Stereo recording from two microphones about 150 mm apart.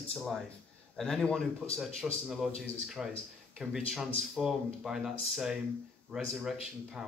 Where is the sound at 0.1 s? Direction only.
5° left (ahead or behind).